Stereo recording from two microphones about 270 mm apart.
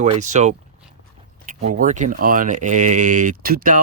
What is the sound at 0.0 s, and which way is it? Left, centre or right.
Speech, right.